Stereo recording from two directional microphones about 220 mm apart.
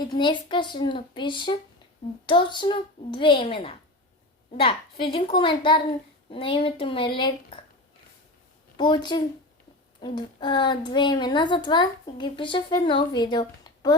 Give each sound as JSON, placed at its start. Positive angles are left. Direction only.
{"t": 0.0, "sound": "a woman's voice", "side_deg": 20}
{"t": 8.8, "sound": "a woman's voice", "side_deg": 20}